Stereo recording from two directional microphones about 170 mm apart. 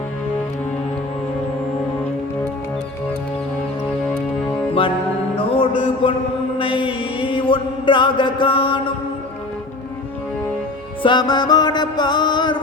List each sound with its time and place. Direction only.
5.4 s music: 30° left (ahead or behind)
6.6 s mantra: 30° left (ahead or behind)
11.0 s music: 25° left (ahead or behind)